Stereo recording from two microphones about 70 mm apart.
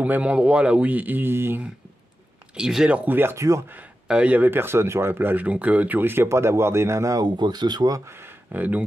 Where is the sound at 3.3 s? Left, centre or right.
Right.